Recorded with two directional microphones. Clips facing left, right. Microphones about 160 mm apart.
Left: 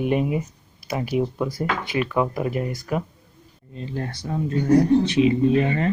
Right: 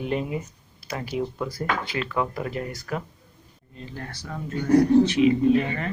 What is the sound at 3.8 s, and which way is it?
Speech, 25° left (ahead or behind).